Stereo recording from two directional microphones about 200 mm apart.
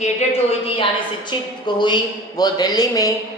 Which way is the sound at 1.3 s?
20° left (ahead or behind).